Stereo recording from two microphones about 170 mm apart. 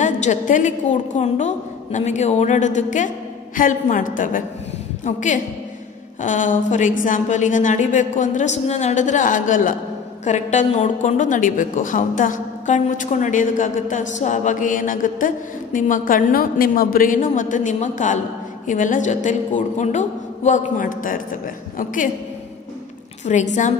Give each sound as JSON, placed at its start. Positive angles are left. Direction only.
{"t": 0.0, "sound": "a woman's voice", "side_deg": 45}
{"t": 23.2, "sound": "a woman's voice", "side_deg": 45}